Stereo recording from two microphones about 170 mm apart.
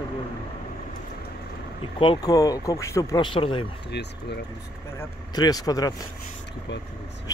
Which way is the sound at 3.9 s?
80° left.